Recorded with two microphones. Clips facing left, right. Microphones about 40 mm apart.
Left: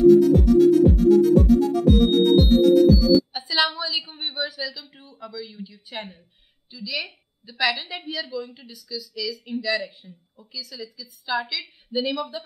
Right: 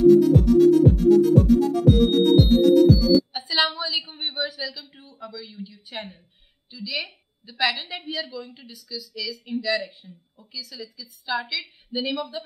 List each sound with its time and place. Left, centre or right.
0.0 s music: centre
4.9 s a woman's voice: centre